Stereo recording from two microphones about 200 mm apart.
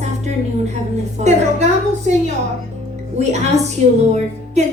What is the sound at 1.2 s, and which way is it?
Speech, 35° right (ahead or behind).